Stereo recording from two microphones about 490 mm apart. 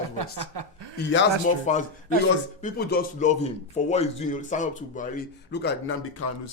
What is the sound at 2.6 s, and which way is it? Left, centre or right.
A man's voice, centre.